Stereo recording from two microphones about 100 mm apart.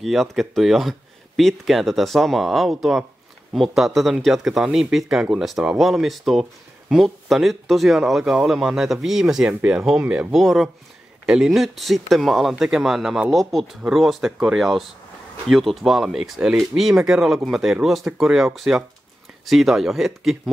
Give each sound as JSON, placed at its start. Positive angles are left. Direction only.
{"t": 0.0, "sound": "speech", "side_deg": 0}